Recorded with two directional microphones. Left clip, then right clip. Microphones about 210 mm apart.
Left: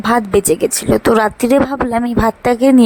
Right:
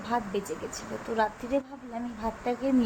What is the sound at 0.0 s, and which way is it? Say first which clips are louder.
Speech: left 17 dB; 55° left (ahead or behind).